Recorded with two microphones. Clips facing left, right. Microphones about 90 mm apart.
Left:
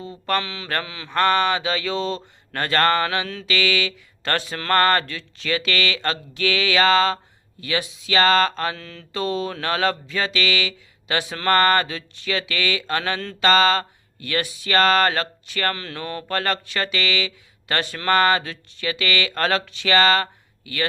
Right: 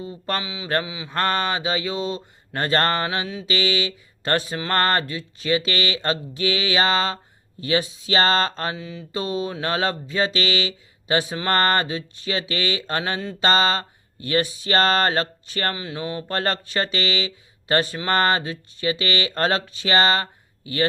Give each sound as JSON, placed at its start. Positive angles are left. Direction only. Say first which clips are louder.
{"t": 0.0, "sound": "mantra", "louder": "left 3 dB", "side_deg": -15}
{"t": 1.1, "sound": "mantra", "louder": "left 4 dB", "side_deg": -25}
{"t": 8.7, "sound": "mantra", "louder": "right 2 dB", "side_deg": -10}
{"t": 15.7, "sound": "mantra", "louder": "right 1 dB", "side_deg": -15}
{"t": 16.3, "sound": "mantra", "louder": "left 1 dB", "side_deg": -30}
{"t": 18.1, "sound": "mantra", "louder": "left 3 dB", "side_deg": -30}